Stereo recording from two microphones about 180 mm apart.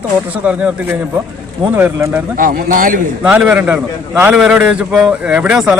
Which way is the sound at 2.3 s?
50° right (ahead or behind).